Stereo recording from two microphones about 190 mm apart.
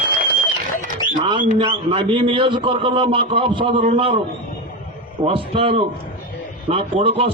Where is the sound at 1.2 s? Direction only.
25° right (ahead or behind).